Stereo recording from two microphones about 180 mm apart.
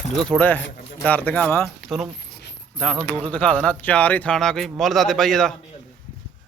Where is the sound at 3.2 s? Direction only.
5° left (ahead or behind).